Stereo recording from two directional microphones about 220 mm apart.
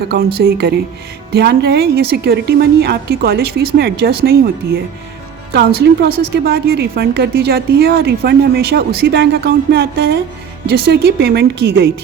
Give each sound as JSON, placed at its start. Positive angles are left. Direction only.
{"t": 0.3, "sound": "a woman's voice", "side_deg": -45}